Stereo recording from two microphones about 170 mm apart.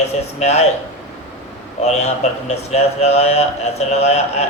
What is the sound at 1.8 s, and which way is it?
Speech, 40° left (ahead or behind).